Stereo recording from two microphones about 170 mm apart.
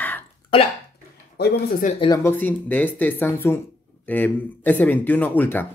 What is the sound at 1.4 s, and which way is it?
Speech, 55° left (ahead or behind).